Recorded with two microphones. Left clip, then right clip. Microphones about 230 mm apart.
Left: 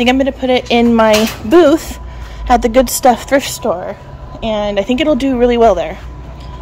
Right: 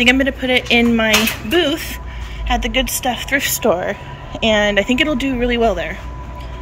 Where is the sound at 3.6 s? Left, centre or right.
Right.